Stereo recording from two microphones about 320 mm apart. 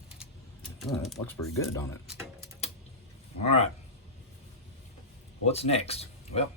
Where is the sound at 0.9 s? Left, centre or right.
Centre.